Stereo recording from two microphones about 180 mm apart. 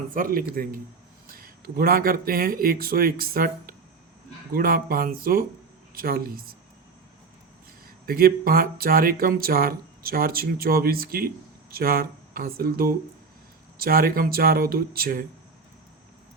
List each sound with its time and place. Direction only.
0.1 s speech: 50° right (ahead or behind)
8.0 s speech: 55° right (ahead or behind)